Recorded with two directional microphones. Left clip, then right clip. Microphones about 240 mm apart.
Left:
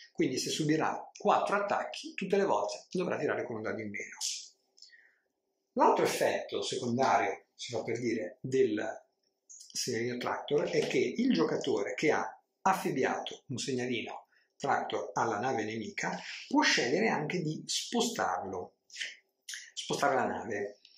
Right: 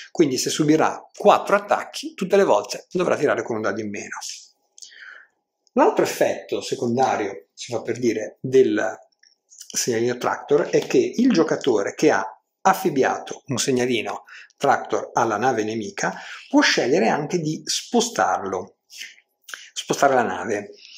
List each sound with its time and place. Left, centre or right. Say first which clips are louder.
0.1 s speech: right 12 dB; right
5.8 s speech: right 8 dB; right
7.5 s speech: right 8 dB; right
19.7 s speech: right 12 dB; right